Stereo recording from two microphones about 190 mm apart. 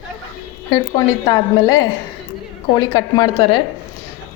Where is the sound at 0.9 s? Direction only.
20° left (ahead or behind).